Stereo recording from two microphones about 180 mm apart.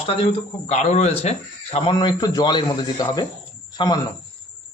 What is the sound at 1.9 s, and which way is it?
A man's voice, 20° left (ahead or behind).